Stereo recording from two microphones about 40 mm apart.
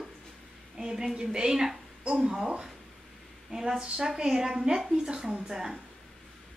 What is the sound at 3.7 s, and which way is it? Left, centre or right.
Speech, right.